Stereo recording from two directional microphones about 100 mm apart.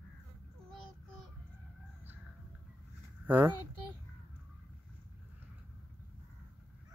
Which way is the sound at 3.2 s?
20° right (ahead or behind).